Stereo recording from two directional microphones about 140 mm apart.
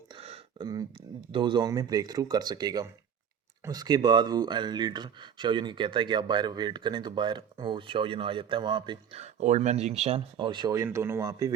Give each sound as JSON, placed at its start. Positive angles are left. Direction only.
{"t": 0.1, "sound": "a sound", "side_deg": -45}
{"t": 0.6, "sound": "speech", "side_deg": -30}
{"t": 9.2, "sound": "speech", "side_deg": -55}
{"t": 10.3, "sound": "speech", "side_deg": -35}
{"t": 10.8, "sound": "speech", "side_deg": -20}